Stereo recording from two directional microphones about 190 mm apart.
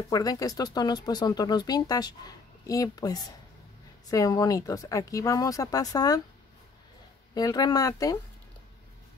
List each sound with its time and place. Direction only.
0.1 s speech: 20° left (ahead or behind)
7.3 s speech: 20° left (ahead or behind)